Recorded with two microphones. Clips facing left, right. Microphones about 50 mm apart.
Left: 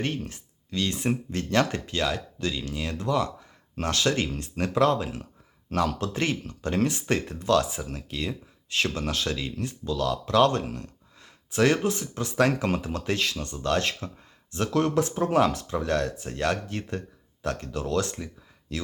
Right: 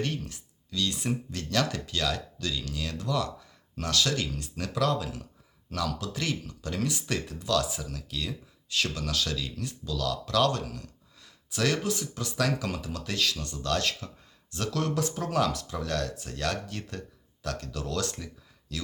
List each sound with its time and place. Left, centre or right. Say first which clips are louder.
0.0 s speech: left 2 dB; left